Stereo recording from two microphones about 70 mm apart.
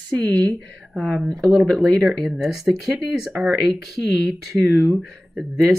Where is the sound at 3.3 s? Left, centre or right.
Centre.